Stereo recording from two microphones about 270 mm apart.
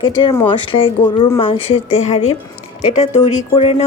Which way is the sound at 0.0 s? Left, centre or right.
Centre.